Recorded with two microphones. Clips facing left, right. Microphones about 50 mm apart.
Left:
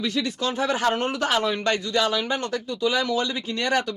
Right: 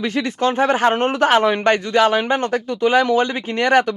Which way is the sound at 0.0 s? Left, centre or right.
Right.